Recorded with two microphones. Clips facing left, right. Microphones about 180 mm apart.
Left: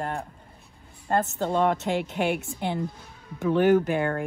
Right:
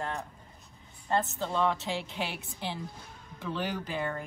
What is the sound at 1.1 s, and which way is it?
A woman's voice, 45° left (ahead or behind).